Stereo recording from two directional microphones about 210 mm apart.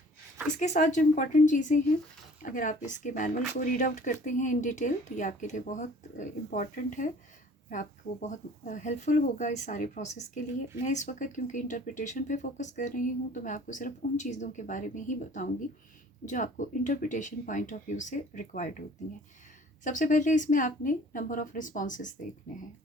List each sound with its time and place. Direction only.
0.6 s speech: 35° left (ahead or behind)
19.8 s speech: 35° left (ahead or behind)